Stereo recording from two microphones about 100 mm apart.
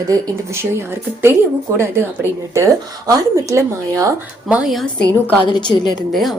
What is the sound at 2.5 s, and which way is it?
Speech, 30° right (ahead or behind).